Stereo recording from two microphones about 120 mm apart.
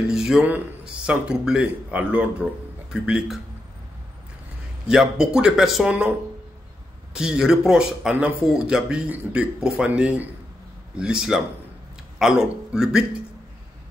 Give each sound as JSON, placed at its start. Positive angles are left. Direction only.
{"t": 0.1, "sound": "speech", "side_deg": -5}
{"t": 4.8, "sound": "speech", "side_deg": -5}
{"t": 7.2, "sound": "speech", "side_deg": -5}